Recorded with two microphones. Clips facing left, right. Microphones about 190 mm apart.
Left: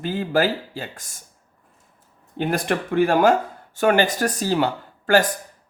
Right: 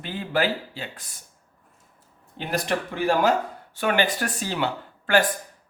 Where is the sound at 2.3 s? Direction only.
50° left (ahead or behind).